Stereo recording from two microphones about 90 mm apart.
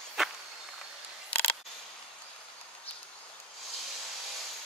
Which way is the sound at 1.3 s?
15° left (ahead or behind).